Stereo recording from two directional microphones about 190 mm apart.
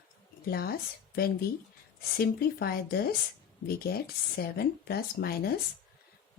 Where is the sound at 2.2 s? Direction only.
55° left (ahead or behind).